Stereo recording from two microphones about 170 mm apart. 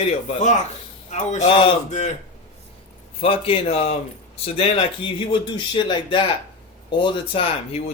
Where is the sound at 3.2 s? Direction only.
35° left (ahead or behind).